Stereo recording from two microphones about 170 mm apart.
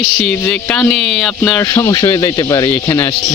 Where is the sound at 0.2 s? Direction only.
10° left (ahead or behind).